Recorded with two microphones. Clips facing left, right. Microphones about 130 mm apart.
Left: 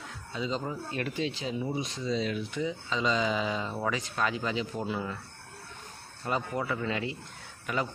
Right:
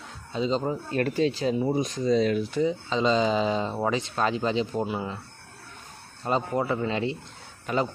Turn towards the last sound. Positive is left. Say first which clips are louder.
# right 5 dB
turn(degrees=-30)  # may be behind; listen again after turning